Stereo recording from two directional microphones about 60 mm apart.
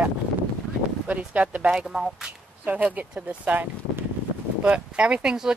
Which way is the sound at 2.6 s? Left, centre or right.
Right.